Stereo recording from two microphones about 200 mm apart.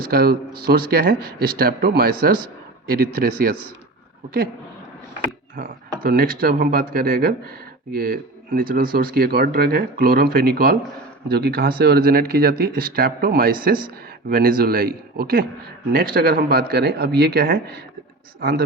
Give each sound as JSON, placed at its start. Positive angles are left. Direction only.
{"t": 0.0, "sound": "speech", "side_deg": -50}
{"t": 5.5, "sound": "speech", "side_deg": -45}